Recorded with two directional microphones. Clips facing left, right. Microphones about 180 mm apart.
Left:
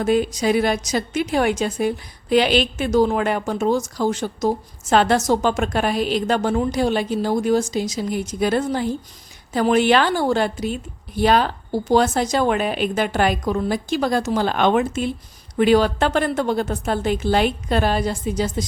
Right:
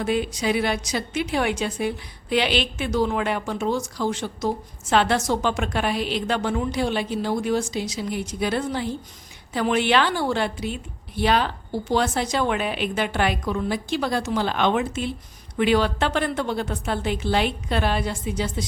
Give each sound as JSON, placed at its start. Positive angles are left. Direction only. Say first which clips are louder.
{"t": 0.0, "sound": "a woman's voice", "louder": "left 5 dB", "side_deg": 45}